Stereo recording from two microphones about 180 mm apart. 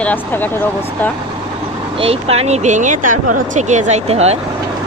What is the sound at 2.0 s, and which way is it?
Speech, 30° right (ahead or behind).